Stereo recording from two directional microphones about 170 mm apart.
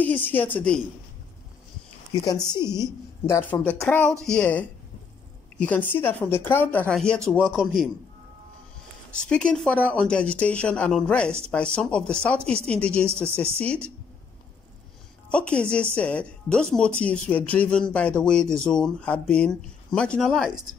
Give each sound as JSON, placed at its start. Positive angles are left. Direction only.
{"t": 0.0, "sound": "speech", "side_deg": 10}
{"t": 2.2, "sound": "a woman's voice", "side_deg": 25}
{"t": 5.7, "sound": "speech", "side_deg": 10}
{"t": 9.3, "sound": "speech", "side_deg": 5}
{"t": 15.2, "sound": "a woman's voice", "side_deg": 5}